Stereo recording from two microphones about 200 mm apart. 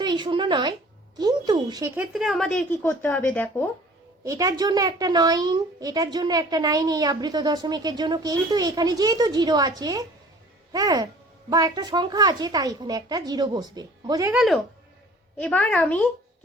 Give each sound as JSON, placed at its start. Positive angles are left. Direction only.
{"t": 0.0, "sound": "a woman's voice", "side_deg": -20}
{"t": 2.0, "sound": "speech", "side_deg": 0}
{"t": 4.2, "sound": "a woman's voice", "side_deg": -15}
{"t": 14.3, "sound": "speech", "side_deg": 0}